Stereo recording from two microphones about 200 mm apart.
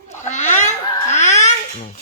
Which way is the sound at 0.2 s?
35° left (ahead or behind).